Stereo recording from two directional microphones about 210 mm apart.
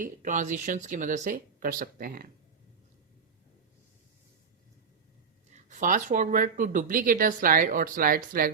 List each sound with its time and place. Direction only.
0.0 s speech: 35° right (ahead or behind)
5.6 s speech: 40° right (ahead or behind)